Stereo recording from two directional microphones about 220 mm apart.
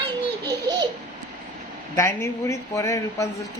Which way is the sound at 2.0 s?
10° left (ahead or behind).